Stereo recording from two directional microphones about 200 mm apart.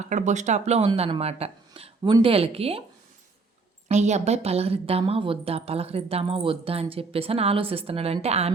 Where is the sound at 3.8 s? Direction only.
35° right (ahead or behind).